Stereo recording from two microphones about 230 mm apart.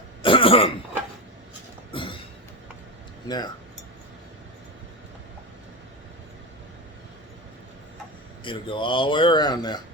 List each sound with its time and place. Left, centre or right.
0.2 s throat clearing: left
1.9 s a sound: left
3.2 s speech: centre
8.4 s speech: left